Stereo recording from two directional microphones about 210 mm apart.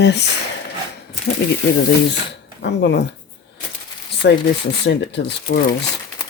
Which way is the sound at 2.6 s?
55° left (ahead or behind).